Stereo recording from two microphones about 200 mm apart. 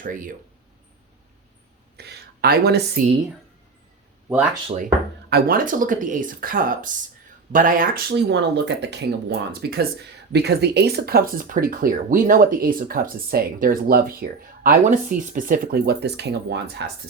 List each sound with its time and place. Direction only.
0.0 s speech: 40° right (ahead or behind)
2.0 s speech: 55° right (ahead or behind)
5.3 s speech: 45° right (ahead or behind)